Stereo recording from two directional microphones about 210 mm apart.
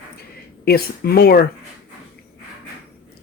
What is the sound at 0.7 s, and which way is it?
Speech, 45° left (ahead or behind).